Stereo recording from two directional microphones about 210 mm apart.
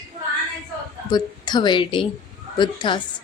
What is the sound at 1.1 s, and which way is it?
A woman's voice, 20° left (ahead or behind).